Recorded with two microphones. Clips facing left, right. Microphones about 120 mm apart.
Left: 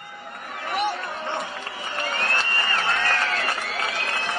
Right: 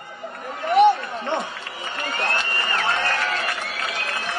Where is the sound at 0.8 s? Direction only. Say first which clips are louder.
Right 12 dB; 25° right (ahead or behind).